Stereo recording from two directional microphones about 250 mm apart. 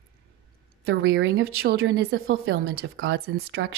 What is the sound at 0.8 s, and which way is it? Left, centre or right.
Speech, right.